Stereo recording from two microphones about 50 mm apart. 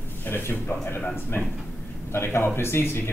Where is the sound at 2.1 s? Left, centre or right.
Left.